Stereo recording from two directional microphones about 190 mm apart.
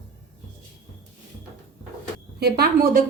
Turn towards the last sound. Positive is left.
turn(degrees=-55)  # may be behind; listen again after turning